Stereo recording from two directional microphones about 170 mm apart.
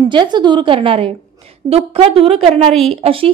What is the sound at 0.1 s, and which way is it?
A woman's voice, 25° right (ahead or behind).